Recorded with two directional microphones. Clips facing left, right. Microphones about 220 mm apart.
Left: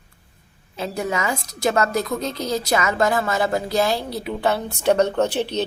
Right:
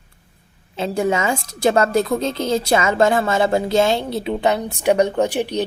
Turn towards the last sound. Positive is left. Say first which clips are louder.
# right 2 dB
turn(degrees=-15)  # may be behind; listen again after turning